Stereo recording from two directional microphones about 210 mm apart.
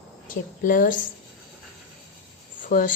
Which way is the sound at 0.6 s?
40° left (ahead or behind).